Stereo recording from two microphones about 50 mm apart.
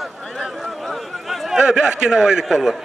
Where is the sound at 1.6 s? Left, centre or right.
Centre.